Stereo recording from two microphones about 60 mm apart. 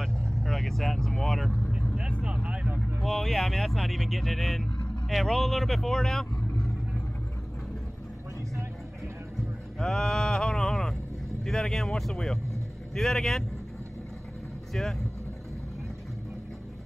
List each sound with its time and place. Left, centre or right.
0.4 s speech: centre
2.2 s vehicle: centre
3.0 s speech: centre
9.8 s speech: centre
14.7 s speech: centre